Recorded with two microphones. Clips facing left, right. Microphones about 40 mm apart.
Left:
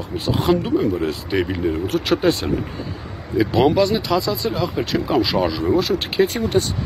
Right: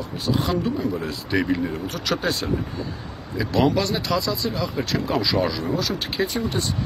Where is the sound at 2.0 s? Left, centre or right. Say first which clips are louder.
Left 5 dB; left.